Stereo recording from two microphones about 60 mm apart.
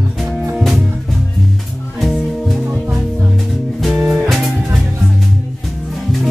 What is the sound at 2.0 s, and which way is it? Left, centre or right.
Music, centre.